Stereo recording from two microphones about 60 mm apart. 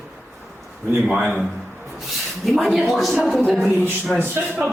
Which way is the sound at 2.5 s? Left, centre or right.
Centre.